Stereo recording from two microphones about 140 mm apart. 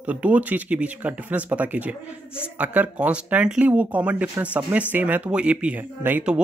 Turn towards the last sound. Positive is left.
turn(degrees=-10)  # may be behind; listen again after turning